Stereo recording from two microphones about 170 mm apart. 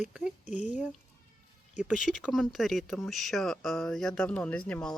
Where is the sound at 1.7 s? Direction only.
50° left (ahead or behind).